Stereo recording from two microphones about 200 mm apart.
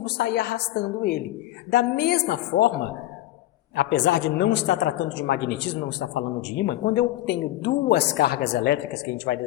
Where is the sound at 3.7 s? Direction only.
60° left (ahead or behind).